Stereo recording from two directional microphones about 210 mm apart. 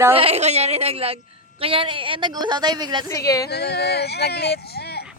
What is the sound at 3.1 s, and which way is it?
Speech, 15° left (ahead or behind).